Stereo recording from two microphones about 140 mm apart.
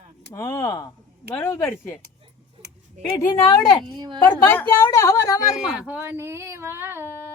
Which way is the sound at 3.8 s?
35° right (ahead or behind).